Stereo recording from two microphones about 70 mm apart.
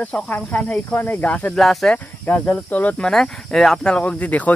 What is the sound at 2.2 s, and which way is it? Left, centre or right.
Cricket, left.